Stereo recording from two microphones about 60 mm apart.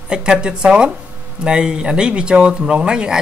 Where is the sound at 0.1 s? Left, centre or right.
Centre.